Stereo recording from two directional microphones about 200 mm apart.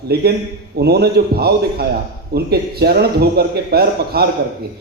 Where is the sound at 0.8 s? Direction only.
55° right (ahead or behind).